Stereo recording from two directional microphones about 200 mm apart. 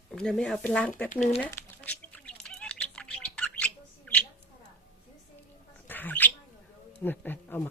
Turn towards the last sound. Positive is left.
turn(degrees=10)  # may be behind; listen again after turning